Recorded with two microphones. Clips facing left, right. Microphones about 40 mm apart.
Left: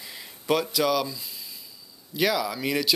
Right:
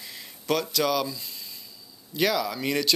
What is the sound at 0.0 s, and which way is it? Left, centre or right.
Speech, centre.